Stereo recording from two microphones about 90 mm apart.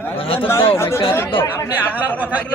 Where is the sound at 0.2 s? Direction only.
90° left.